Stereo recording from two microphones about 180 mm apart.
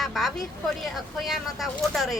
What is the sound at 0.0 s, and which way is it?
A woman's voice, centre (ahead or behind).